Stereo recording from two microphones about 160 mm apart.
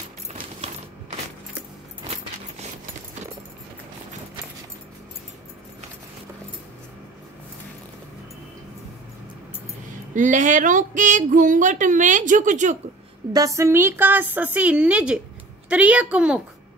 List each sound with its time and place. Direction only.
10.1 s speech: 50° right (ahead or behind)
13.3 s a woman's voice: 20° right (ahead or behind); by 16.3 s 5° right (ahead or behind)